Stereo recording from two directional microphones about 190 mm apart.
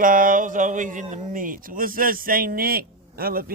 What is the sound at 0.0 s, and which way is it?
Speech, 45° right (ahead or behind).